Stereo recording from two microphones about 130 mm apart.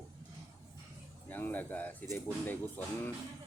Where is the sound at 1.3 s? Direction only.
15° left (ahead or behind).